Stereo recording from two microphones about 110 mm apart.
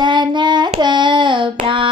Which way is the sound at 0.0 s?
45° right (ahead or behind).